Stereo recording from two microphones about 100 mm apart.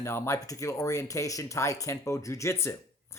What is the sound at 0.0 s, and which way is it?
Speech, 25° left (ahead or behind).